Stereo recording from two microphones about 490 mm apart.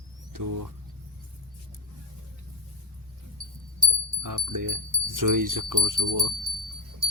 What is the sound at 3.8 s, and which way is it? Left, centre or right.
Speech, right.